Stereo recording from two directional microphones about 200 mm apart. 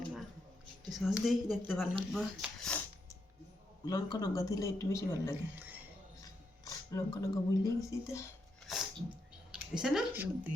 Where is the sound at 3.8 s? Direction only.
20° left (ahead or behind).